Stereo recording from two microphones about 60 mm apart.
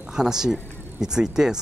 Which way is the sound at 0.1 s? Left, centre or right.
Centre.